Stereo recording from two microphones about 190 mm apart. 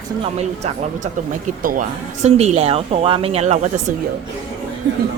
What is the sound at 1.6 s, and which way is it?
Speech, 45° right (ahead or behind).